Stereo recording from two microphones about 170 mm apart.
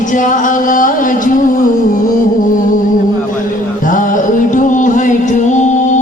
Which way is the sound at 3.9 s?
50° left (ahead or behind).